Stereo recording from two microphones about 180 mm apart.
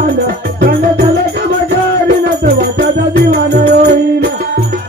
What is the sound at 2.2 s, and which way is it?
Music, 60° right (ahead or behind).